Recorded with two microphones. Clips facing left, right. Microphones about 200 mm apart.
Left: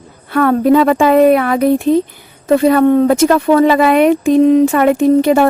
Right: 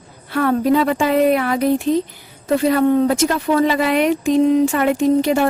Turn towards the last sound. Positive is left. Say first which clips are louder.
# left 5 dB
turn(degrees=55)  # may be behind; listen again after turning